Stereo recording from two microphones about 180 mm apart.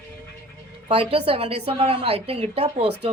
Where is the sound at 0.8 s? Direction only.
30° right (ahead or behind).